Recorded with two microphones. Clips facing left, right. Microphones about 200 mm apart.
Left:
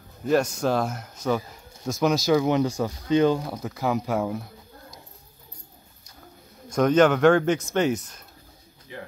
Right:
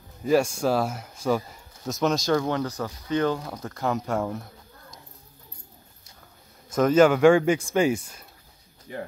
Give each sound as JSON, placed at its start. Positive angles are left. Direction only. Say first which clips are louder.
{"t": 0.2, "sound": "speech", "louder": "right 1 dB", "side_deg": -5}
{"t": 2.4, "sound": "speech", "louder": "left 5 dB", "side_deg": 15}
{"t": 6.7, "sound": "speech", "louder": "right 1 dB", "side_deg": -5}
{"t": 8.9, "sound": "speech", "louder": "right 4 dB", "side_deg": -45}